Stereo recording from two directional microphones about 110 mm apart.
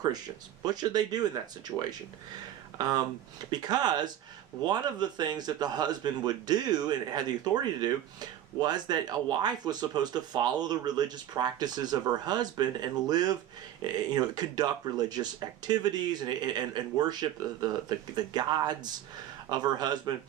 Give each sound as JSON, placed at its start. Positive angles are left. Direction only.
{"t": 0.6, "sound": "speech", "side_deg": -35}